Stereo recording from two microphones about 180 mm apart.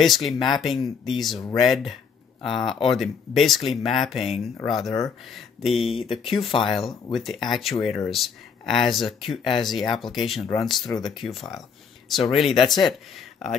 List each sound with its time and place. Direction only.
0.0 s speech: centre (ahead or behind)
5.9 s speech: 30° left (ahead or behind)
6.6 s speech: centre (ahead or behind)